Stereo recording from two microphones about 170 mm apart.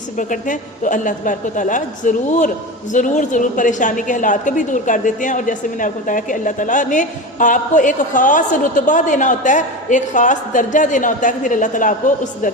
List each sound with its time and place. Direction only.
0.2 s a woman's voice: 50° left (ahead or behind)